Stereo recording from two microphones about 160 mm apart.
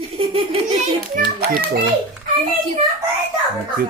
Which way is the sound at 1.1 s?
70° right (ahead or behind).